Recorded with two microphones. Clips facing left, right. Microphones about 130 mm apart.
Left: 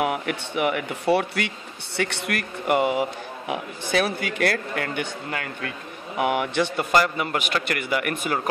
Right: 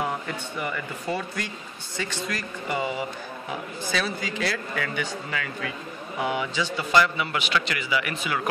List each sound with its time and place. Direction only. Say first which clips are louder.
0.0 s a man's voice: left 4 dB; 75° left (ahead or behind); by 8.4 s 50° left (ahead or behind)